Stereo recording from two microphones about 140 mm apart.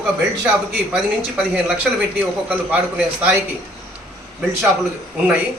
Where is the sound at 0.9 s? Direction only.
10° right (ahead or behind).